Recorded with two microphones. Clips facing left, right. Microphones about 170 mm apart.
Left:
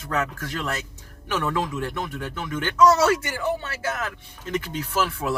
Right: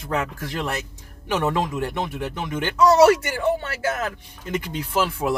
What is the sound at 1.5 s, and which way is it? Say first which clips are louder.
Speech: right 2 dB; 15° right (ahead or behind).